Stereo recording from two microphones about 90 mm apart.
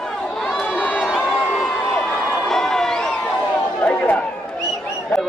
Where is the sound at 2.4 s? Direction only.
5° left (ahead or behind).